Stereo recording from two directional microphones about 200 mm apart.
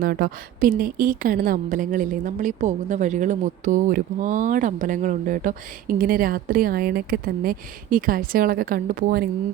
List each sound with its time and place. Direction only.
0.0 s a woman's voice: 45° right (ahead or behind)